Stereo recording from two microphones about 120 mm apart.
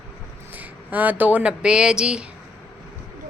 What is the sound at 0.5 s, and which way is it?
Speech, 15° right (ahead or behind).